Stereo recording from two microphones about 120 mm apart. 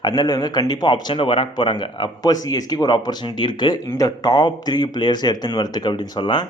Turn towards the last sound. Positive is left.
turn(degrees=40)  # may be behind; listen again after turning